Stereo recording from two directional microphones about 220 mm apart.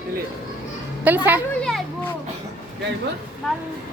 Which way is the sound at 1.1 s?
10° right (ahead or behind).